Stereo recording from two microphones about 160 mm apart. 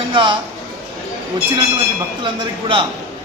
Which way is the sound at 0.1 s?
30° right (ahead or behind).